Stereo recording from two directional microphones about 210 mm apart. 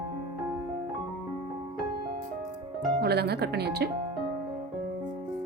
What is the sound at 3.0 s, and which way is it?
Speech, 50° right (ahead or behind).